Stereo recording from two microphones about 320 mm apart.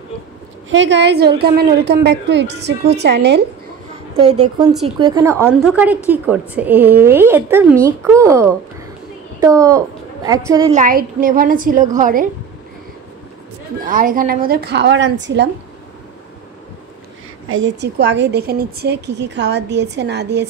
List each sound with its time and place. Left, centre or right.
0.7 s a woman's voice: right
4.2 s a woman's voice: centre
10.7 s a woman's voice: right
13.8 s a woman's voice: right
17.5 s a woman's voice: right